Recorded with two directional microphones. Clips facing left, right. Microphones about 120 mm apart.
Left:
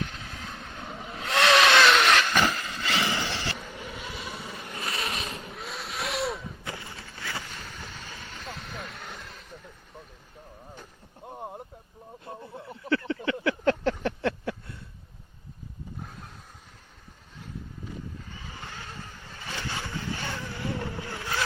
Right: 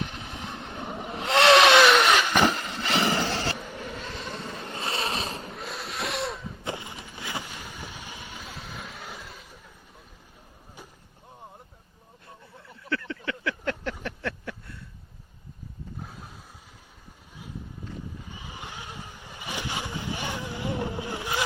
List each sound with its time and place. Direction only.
0.0 s vehicle: 20° right (ahead or behind)
1.1 s vehicle: 25° right (ahead or behind)
1.7 s vehicle: 10° right (ahead or behind)
2.6 s vehicle: 25° right (ahead or behind)
3.2 s a sound: 45° right (ahead or behind)
3.8 s vehicle: 15° left (ahead or behind)
4.6 s a sound: 25° right (ahead or behind)
5.5 s vehicle: centre (ahead or behind)
6.7 s vehicle: 20° right (ahead or behind); by 9.6 s 5° right (ahead or behind)
11.3 s a sound: 50° left (ahead or behind)
12.3 s a sound: 30° left (ahead or behind)
16.0 s vehicle: centre (ahead or behind)
18.3 s vehicle: 15° right (ahead or behind)